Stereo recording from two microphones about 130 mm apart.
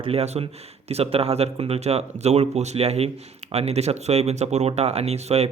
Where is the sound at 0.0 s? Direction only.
50° right (ahead or behind).